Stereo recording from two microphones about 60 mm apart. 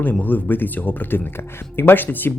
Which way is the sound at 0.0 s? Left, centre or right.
Left.